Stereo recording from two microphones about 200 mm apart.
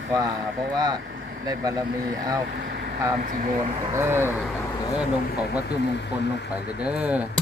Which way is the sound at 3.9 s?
10° right (ahead or behind).